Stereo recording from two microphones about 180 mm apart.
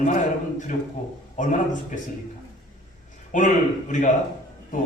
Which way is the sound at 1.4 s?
45° left (ahead or behind).